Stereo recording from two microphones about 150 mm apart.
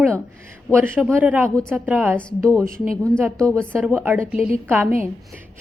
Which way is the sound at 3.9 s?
15° right (ahead or behind).